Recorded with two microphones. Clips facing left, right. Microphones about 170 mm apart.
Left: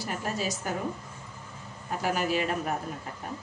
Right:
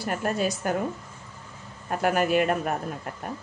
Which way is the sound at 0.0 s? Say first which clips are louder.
Right 5 dB; 55° right (ahead or behind).